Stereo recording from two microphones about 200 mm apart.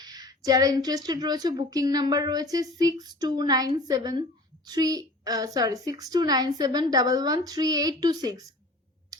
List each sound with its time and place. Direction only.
0.0 s a woman's voice: 20° right (ahead or behind)